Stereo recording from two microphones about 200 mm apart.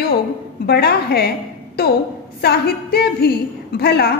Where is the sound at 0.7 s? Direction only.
50° left (ahead or behind).